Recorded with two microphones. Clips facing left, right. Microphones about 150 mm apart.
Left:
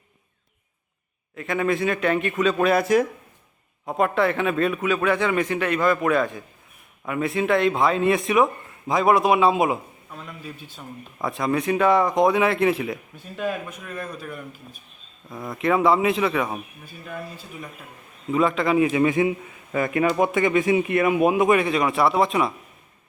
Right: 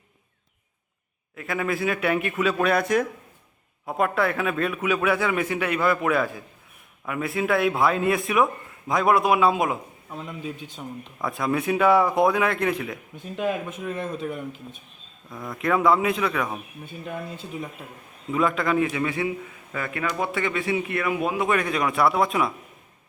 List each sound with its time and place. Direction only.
1.4 s a man's voice: 5° right (ahead or behind)
10.1 s a man's voice: 20° right (ahead or behind)
11.2 s speech: centre (ahead or behind)
13.1 s a man's voice: 15° right (ahead or behind)
15.4 s speech: centre (ahead or behind)
16.8 s a man's voice: 20° right (ahead or behind)
18.3 s speech: centre (ahead or behind)
18.8 s speech: 20° left (ahead or behind)
21.6 s speech: centre (ahead or behind)